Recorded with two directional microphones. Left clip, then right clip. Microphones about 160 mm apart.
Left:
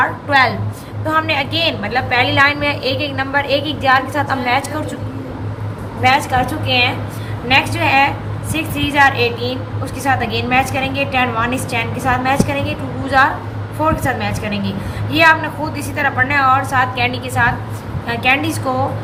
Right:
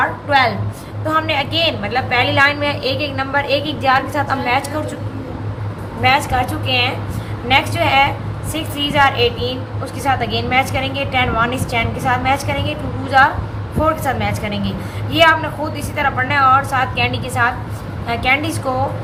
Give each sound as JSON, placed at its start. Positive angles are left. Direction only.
{"t": 0.0, "sound": "a sound", "side_deg": -20}
{"t": 1.0, "sound": "a woman's voice", "side_deg": -20}
{"t": 6.0, "sound": "a woman's voice", "side_deg": -20}
{"t": 16.0, "sound": "a woman's voice", "side_deg": -20}